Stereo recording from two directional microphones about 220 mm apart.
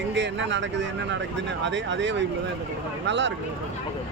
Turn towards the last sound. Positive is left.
turn(degrees=-55)  # may be behind; listen again after turning